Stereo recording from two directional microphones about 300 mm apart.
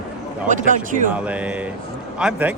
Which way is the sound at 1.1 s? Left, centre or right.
Centre.